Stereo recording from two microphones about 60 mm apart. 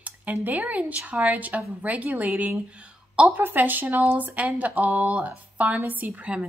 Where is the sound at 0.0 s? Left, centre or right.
Right.